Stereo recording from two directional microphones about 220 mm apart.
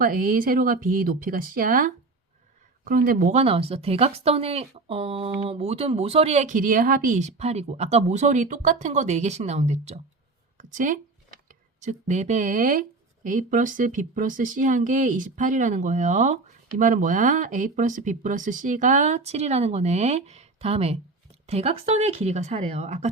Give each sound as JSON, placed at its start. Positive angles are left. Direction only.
{"t": 0.0, "sound": "speech", "side_deg": -40}